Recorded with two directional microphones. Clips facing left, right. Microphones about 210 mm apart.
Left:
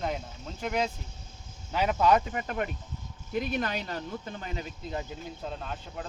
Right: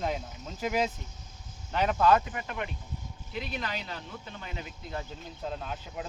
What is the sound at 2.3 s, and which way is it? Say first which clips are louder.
Speech: left 4 dB; 40° left (ahead or behind).